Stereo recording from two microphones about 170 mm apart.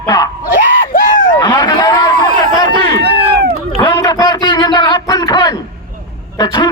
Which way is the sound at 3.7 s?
25° left (ahead or behind).